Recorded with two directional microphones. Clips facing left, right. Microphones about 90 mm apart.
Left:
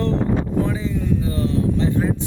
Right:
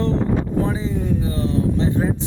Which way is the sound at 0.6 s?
25° right (ahead or behind).